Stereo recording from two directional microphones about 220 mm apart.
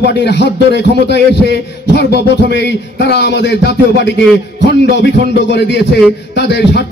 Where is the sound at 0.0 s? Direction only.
50° left (ahead or behind).